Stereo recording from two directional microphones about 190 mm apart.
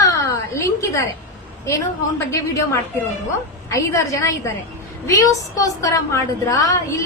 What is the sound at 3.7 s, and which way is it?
A woman's voice, 15° left (ahead or behind).